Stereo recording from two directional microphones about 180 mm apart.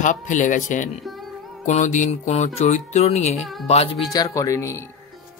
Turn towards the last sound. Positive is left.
turn(degrees=15)  # may be behind; listen again after turning